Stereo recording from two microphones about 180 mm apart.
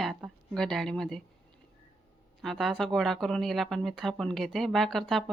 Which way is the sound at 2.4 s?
Centre (ahead or behind).